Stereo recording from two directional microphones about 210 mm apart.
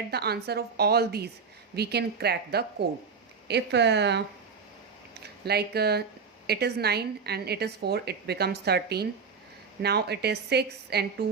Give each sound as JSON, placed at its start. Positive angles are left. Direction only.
{"t": 0.1, "sound": "a woman's voice", "side_deg": -50}
{"t": 5.5, "sound": "a woman's voice", "side_deg": -50}